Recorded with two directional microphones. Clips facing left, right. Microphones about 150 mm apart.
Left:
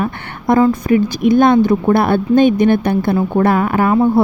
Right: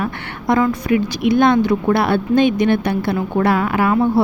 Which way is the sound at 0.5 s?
35° left (ahead or behind).